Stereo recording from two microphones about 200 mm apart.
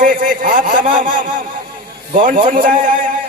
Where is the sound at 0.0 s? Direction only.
45° right (ahead or behind).